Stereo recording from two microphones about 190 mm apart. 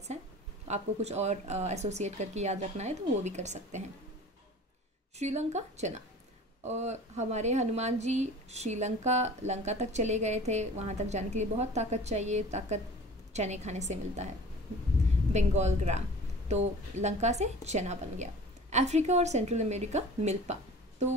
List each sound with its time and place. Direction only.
0.7 s speech: 35° right (ahead or behind)
5.2 s speech: 35° right (ahead or behind)
15.3 s speech: 35° right (ahead or behind)